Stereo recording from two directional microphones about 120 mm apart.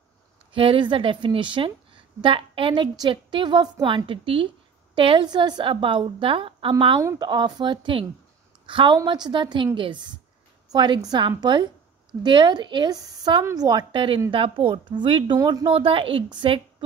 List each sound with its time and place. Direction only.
0.5 s a woman's voice: 45° right (ahead or behind)
7.0 s speech: 25° right (ahead or behind)
7.2 s a woman's voice: 40° right (ahead or behind)